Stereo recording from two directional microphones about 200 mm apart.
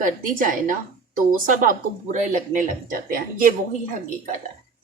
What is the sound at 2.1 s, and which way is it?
Speech, 40° right (ahead or behind).